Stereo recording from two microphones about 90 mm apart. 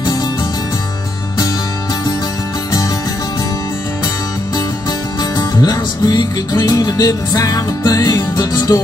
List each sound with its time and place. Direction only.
5.4 s music: 45° left (ahead or behind)